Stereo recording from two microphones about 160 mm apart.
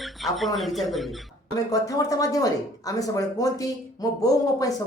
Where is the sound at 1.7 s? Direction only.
20° left (ahead or behind).